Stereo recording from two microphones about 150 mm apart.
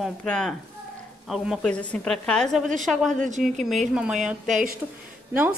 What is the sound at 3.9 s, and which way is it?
Speech, 5° right (ahead or behind).